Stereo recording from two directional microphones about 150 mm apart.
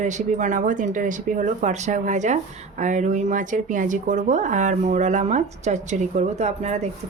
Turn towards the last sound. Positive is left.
turn(degrees=-45)  # may be behind; listen again after turning